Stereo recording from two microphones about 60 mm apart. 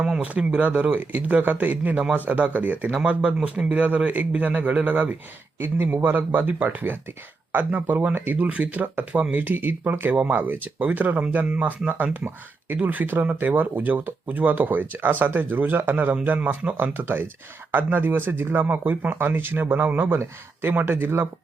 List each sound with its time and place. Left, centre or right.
0.2 s a man's voice: right
3.0 s a man's voice: centre; by 21.2 s right